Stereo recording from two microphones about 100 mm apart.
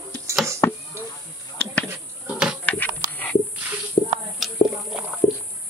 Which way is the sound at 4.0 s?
50° left (ahead or behind).